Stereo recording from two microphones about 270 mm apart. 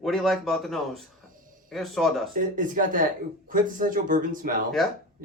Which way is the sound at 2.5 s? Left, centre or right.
Right.